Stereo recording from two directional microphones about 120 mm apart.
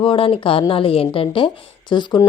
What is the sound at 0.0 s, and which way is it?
A woman's voice, 50° left (ahead or behind).